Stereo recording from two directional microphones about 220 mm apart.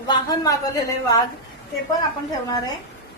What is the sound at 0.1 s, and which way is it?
Speech, 15° left (ahead or behind).